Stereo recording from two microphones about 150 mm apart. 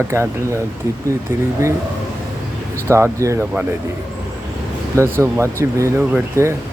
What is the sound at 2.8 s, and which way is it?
Speech, 20° right (ahead or behind).